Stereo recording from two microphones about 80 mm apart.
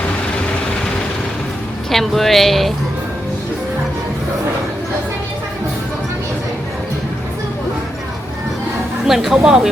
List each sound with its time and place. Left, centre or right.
1.9 s a woman's voice: centre
9.0 s a woman's voice: centre